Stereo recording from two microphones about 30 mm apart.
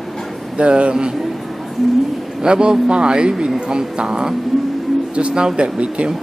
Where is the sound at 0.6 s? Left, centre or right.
Right.